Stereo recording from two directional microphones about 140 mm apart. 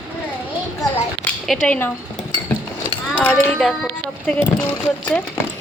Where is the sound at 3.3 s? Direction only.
Centre (ahead or behind).